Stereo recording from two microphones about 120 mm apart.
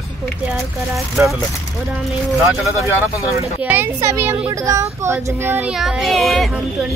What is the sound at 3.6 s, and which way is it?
Speech, 15° right (ahead or behind).